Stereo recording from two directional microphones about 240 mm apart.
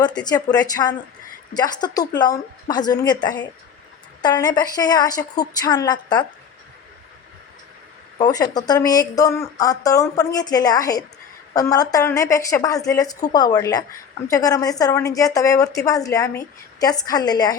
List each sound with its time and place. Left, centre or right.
0.3 s a woman's voice: centre
8.2 s a woman's voice: centre